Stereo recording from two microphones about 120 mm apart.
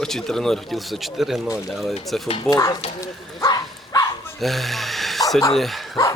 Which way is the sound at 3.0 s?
30° left (ahead or behind).